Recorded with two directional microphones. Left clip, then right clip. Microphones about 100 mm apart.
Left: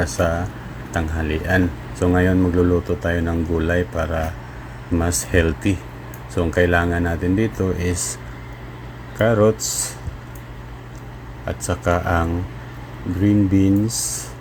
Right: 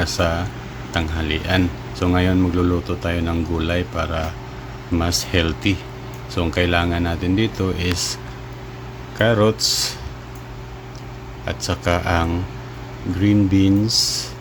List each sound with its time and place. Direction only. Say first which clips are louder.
0.0 s speech: even; centre (ahead or behind)
5.3 s speech: left 4 dB; centre (ahead or behind)
9.1 s speech: left 1 dB; 25° right (ahead or behind)
9.6 s speech: right 7 dB; 5° right (ahead or behind)
11.6 s speech: even; 5° right (ahead or behind)
13.2 s speech: even; 35° right (ahead or behind)
13.8 s speech: right 7 dB; centre (ahead or behind)